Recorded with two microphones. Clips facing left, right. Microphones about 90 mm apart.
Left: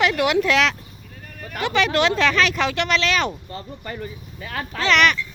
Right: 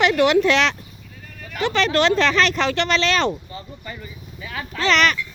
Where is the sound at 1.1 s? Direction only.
40° left (ahead or behind).